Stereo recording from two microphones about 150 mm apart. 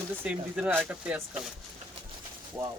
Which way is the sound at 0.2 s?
10° right (ahead or behind).